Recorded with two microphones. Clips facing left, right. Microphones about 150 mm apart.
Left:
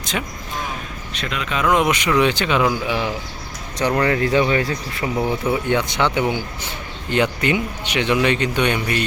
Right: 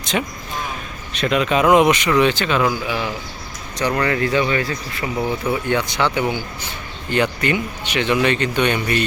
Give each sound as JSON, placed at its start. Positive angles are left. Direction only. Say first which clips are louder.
{"t": 0.0, "sound": "speech", "louder": "right 4 dB", "side_deg": 0}
{"t": 1.3, "sound": "speech", "louder": "right 5 dB", "side_deg": -20}
{"t": 1.9, "sound": "speech", "louder": "right 2 dB", "side_deg": 10}